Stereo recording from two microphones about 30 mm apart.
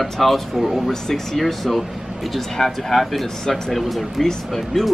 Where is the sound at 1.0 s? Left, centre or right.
Centre.